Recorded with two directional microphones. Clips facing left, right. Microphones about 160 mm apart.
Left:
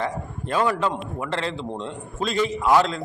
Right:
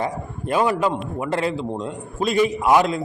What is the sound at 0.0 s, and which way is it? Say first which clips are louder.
A man's voice: right 2 dB; 15° right (ahead or behind).